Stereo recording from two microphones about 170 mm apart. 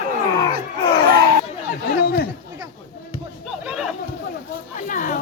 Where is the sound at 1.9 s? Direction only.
65° left (ahead or behind).